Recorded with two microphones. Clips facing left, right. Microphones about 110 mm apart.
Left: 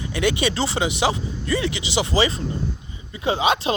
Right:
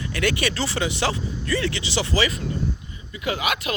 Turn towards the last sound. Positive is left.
turn(degrees=25)  # may be behind; listen again after turning